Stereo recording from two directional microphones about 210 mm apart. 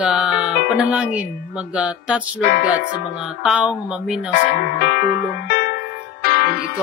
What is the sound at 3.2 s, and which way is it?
Speech, 5° right (ahead or behind).